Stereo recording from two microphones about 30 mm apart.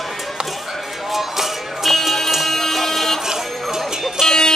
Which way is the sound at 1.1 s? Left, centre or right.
Centre.